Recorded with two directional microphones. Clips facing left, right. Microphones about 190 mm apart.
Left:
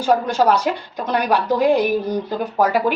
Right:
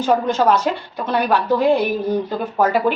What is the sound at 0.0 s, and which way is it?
Speech, 10° left (ahead or behind).